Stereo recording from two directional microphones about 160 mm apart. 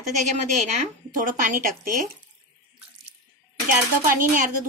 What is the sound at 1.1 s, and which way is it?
Speech, 55° right (ahead or behind).